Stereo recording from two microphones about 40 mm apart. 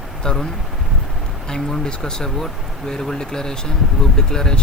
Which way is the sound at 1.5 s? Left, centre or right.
Centre.